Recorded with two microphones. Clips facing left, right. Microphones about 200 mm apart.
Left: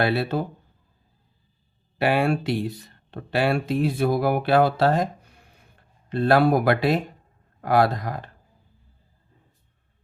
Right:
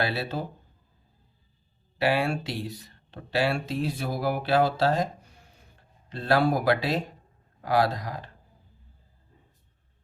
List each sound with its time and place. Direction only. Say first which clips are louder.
0.0 s speech: left 6 dB; 55° left (ahead or behind)
2.0 s speech: left 4 dB; 55° left (ahead or behind)